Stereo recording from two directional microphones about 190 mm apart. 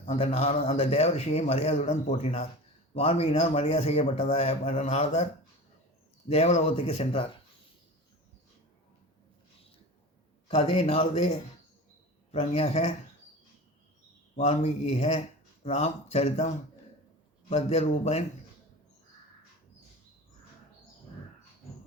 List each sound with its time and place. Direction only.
0.0 s a man's voice: 35° left (ahead or behind)
6.2 s a man's voice: 35° left (ahead or behind)
10.5 s a man's voice: 30° left (ahead or behind)
14.3 s a man's voice: 35° left (ahead or behind)